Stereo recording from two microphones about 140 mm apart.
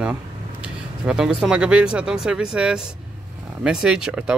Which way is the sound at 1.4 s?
5° right (ahead or behind).